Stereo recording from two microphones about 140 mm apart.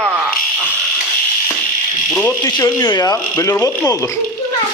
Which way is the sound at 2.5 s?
25° left (ahead or behind).